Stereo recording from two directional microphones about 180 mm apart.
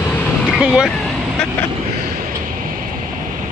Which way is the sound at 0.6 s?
5° right (ahead or behind).